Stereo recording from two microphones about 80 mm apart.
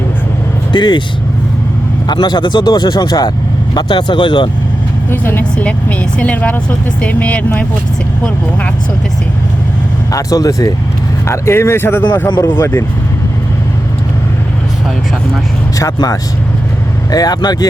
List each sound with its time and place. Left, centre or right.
0.7 s speech: left
2.0 s speech: left
3.8 s speech: left
5.0 s speech: left
10.1 s speech: left
11.3 s speech: left
17.1 s speech: left